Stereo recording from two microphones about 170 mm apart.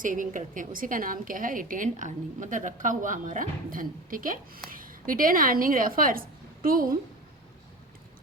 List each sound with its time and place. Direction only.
0.0 s a woman's voice: 50° right (ahead or behind)